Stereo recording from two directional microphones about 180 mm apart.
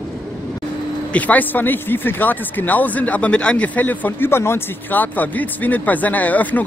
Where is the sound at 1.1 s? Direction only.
10° left (ahead or behind).